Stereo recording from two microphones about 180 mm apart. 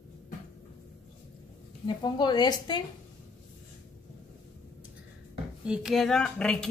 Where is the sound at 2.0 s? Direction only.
25° left (ahead or behind).